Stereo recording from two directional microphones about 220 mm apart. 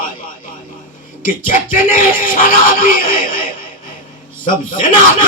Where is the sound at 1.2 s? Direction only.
40° left (ahead or behind).